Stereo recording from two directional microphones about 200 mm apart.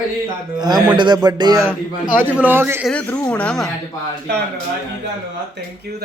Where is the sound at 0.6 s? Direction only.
20° right (ahead or behind).